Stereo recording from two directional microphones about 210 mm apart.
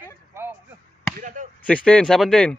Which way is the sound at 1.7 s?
5° left (ahead or behind).